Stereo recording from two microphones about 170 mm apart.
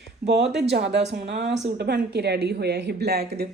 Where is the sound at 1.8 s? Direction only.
75° right (ahead or behind).